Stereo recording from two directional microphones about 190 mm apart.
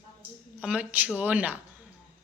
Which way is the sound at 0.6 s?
5° right (ahead or behind).